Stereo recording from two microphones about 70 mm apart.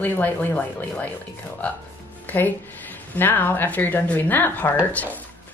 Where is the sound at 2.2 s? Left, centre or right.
Left.